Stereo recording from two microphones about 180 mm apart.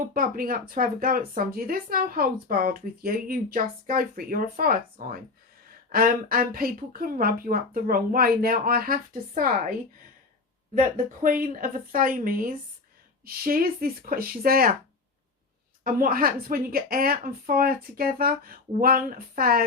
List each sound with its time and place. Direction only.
0.1 s speech: 50° right (ahead or behind)
10.8 s speech: 50° right (ahead or behind)
15.8 s speech: 50° right (ahead or behind)